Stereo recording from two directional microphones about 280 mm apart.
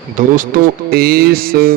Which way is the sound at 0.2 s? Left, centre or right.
Right.